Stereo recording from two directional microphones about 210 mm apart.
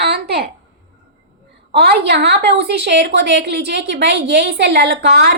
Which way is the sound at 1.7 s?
50° right (ahead or behind).